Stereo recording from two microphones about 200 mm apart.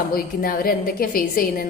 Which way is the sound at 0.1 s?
45° left (ahead or behind).